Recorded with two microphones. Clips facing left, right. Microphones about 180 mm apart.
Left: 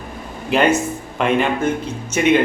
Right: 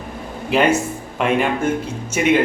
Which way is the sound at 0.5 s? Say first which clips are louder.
Left 1 dB; 5° right (ahead or behind).